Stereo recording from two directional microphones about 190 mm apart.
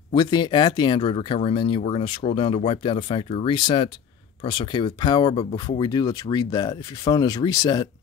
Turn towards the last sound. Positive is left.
turn(degrees=20)  # may be behind; listen again after turning